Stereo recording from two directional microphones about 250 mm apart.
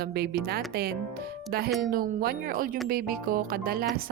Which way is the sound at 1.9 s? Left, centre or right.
Right.